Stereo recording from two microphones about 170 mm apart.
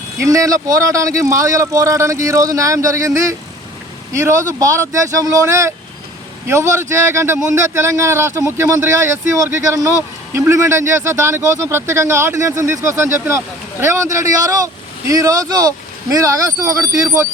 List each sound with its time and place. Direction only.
0.2 s speech: 20° right (ahead or behind)